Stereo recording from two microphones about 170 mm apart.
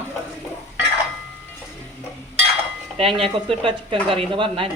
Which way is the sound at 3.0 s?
30° right (ahead or behind).